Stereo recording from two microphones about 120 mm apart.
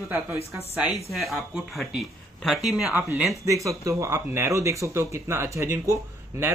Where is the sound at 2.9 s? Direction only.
15° right (ahead or behind).